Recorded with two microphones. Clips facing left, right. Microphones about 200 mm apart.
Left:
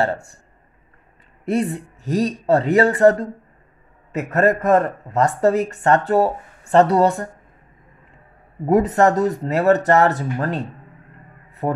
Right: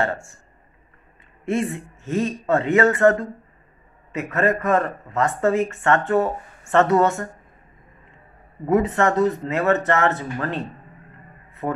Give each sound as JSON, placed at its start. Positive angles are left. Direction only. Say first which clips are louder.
{"t": 0.0, "sound": "speech", "louder": "left 3 dB", "side_deg": 35}
{"t": 1.4, "sound": "speech", "louder": "left 2 dB", "side_deg": 35}
{"t": 8.6, "sound": "speech", "louder": "left 3 dB", "side_deg": 40}
{"t": 11.6, "sound": "speech", "louder": "left 3 dB", "side_deg": 35}